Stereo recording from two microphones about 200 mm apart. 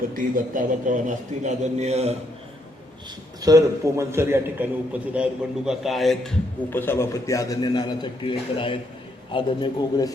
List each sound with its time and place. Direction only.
0.2 s a man's voice: 45° right (ahead or behind)
3.4 s a man's voice: 15° right (ahead or behind); by 10.1 s 25° left (ahead or behind)